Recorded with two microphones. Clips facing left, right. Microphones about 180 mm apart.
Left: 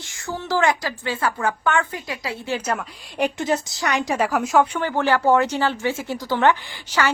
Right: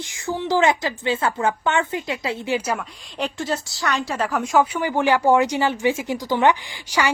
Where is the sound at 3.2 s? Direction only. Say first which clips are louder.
Left 4 dB; 15° left (ahead or behind); by 7.1 s 15° right (ahead or behind).